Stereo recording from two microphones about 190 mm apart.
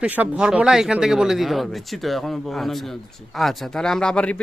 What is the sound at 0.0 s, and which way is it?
Speech, 5° right (ahead or behind).